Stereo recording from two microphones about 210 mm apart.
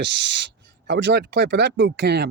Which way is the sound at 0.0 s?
55° right (ahead or behind).